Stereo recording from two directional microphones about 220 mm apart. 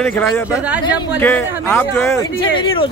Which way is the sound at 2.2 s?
20° left (ahead or behind).